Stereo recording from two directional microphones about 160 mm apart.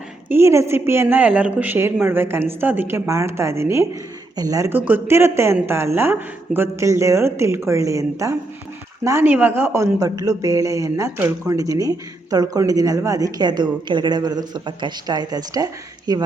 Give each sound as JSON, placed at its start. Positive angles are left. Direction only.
{"t": 0.3, "sound": "speech", "side_deg": -15}